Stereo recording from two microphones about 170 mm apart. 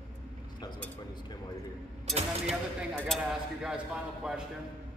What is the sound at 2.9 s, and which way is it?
Speech, 5° right (ahead or behind).